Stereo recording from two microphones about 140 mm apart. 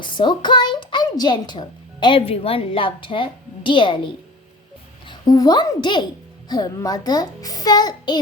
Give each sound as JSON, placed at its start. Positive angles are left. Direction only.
{"t": 0.0, "sound": "a child's voice", "side_deg": 35}